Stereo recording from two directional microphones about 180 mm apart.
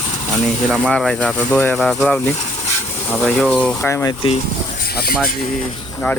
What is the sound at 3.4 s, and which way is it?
Speech, centre (ahead or behind).